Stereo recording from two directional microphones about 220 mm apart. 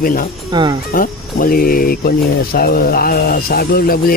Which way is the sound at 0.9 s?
40° left (ahead or behind).